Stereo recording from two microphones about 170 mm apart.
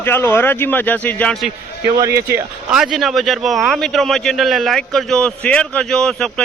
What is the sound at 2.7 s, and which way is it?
A man's voice, 5° right (ahead or behind).